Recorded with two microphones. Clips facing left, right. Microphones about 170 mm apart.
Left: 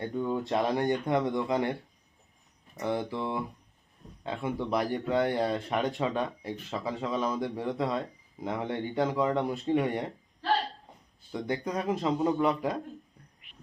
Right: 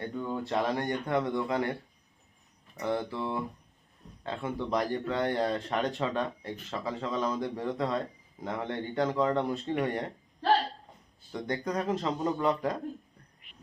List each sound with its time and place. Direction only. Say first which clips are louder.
0.0 s speech: left 3 dB; 20° left (ahead or behind)
2.7 s speech: left 1 dB; 15° left (ahead or behind)
11.3 s speech: left 1 dB; 10° left (ahead or behind)